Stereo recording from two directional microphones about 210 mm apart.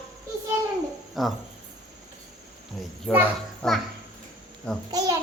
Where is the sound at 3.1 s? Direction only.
5° right (ahead or behind).